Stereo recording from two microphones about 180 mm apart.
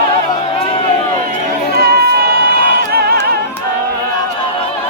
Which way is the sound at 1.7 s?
60° right (ahead or behind).